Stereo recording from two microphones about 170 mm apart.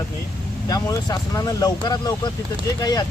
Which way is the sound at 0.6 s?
20° left (ahead or behind).